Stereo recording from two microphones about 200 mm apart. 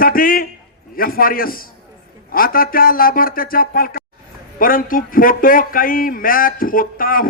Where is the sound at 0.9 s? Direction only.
45° left (ahead or behind).